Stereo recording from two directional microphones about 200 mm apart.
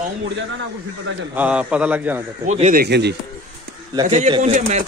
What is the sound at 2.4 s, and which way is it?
Speech, 35° right (ahead or behind).